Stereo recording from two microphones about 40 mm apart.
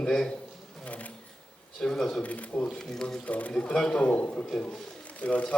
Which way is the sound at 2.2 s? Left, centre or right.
Left.